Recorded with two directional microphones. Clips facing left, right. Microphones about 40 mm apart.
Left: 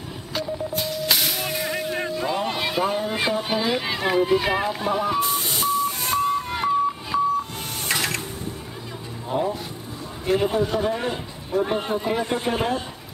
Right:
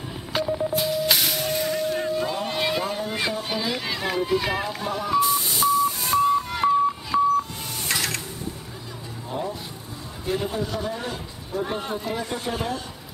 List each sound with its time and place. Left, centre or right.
0.3 s telephone dialing: centre
0.7 s music: centre
1.7 s vehicle: centre
2.0 s a sound: centre
2.8 s speech: centre
5.2 s a sound: left
7.1 s a sound: centre
9.3 s a man's voice: left
11.6 s a man's voice: left